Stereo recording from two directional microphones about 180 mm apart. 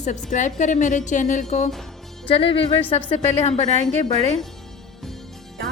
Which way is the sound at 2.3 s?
30° left (ahead or behind).